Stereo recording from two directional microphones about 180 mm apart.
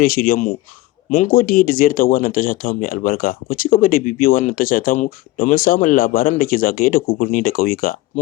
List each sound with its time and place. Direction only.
0.0 s speech: 55° left (ahead or behind)